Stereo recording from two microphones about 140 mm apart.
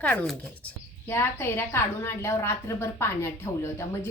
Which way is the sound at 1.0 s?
20° left (ahead or behind).